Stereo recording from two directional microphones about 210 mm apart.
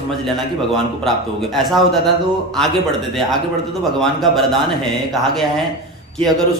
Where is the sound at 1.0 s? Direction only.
Centre (ahead or behind).